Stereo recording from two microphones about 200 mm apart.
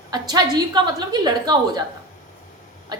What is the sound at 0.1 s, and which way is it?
A woman's voice, 20° right (ahead or behind).